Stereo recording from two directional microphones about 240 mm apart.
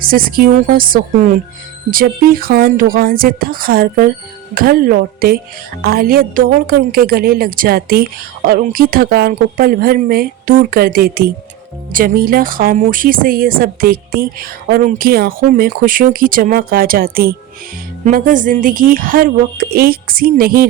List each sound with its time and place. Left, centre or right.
0.0 s speech: right